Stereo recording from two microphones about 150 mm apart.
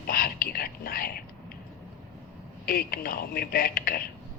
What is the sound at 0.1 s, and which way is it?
Whispering, 80° left.